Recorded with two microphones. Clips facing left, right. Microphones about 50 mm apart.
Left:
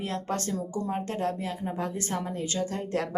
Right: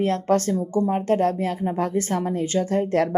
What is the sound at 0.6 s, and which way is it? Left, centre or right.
Speech, right.